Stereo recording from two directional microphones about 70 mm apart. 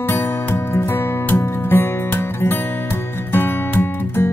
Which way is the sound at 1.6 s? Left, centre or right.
Left.